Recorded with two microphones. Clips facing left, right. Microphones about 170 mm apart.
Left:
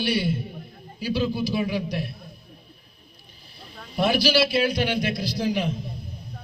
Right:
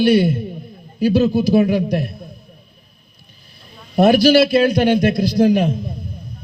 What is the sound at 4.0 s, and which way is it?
A man's voice, 50° right (ahead or behind).